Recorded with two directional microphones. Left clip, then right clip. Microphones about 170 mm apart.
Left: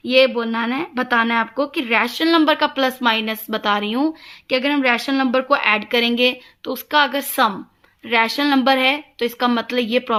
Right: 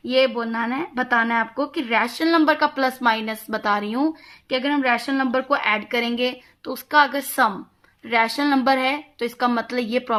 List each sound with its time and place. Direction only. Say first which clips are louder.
0.3 s a woman's voice: left 3 dB; 45° left (ahead or behind)
4.4 s a woman's voice: left 3 dB; 25° left (ahead or behind)
5.1 s a woman's voice: left 4 dB; 50° left (ahead or behind)